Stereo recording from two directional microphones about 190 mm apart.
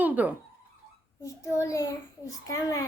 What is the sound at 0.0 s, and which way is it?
Speech, 10° right (ahead or behind).